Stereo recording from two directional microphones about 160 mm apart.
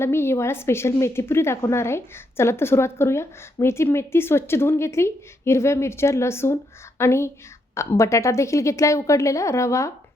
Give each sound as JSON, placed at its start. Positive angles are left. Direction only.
{"t": 0.0, "sound": "a woman's voice", "side_deg": 15}